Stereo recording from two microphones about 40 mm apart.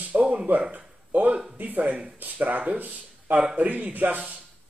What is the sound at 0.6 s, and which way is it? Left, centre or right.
Speech, right.